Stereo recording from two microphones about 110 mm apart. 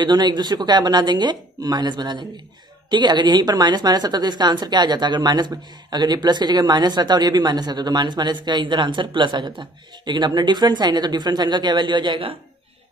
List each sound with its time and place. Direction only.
0.0 s a woman's voice: 40° right (ahead or behind)